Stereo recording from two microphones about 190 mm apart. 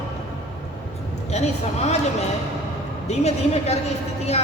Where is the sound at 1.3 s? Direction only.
35° left (ahead or behind).